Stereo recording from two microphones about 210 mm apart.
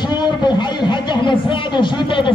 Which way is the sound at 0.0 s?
20° left (ahead or behind).